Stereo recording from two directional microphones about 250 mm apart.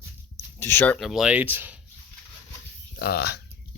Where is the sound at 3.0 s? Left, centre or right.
Left.